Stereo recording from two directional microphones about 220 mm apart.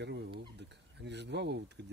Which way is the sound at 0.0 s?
50° right (ahead or behind).